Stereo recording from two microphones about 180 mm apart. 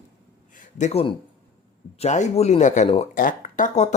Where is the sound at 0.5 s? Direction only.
40° left (ahead or behind).